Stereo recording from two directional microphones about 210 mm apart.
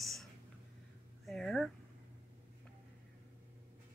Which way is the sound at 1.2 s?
Centre (ahead or behind).